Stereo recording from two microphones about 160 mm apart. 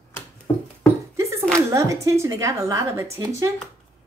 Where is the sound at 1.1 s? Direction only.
20° right (ahead or behind).